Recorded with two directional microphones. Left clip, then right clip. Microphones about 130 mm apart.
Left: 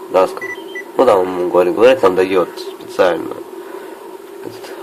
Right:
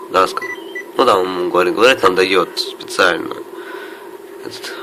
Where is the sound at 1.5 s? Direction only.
20° left (ahead or behind).